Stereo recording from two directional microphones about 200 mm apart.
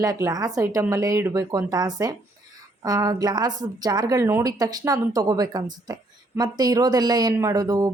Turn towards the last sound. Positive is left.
turn(degrees=-15)  # may be behind; listen again after turning